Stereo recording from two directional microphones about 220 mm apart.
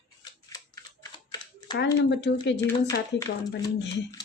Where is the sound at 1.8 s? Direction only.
50° left (ahead or behind).